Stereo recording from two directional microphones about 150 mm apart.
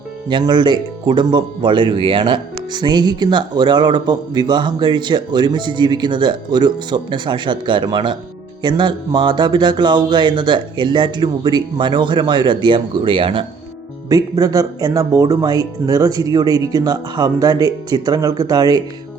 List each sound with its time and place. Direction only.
0.3 s speech: 30° right (ahead or behind)
14.1 s speech: 25° right (ahead or behind)